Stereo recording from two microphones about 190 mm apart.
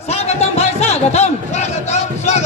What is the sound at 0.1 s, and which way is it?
Music, 35° left (ahead or behind).